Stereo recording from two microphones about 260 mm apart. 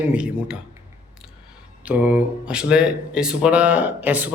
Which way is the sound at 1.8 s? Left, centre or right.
Centre.